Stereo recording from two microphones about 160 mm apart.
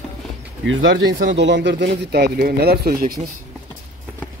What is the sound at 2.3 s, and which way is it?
Speech, 75° right (ahead or behind).